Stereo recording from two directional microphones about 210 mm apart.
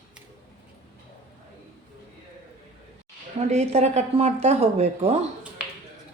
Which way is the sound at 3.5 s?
30° right (ahead or behind).